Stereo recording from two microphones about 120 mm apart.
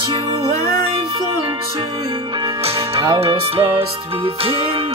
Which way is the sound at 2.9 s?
50° right (ahead or behind).